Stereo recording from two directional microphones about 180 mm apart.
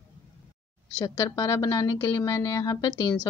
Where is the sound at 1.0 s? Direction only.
20° left (ahead or behind).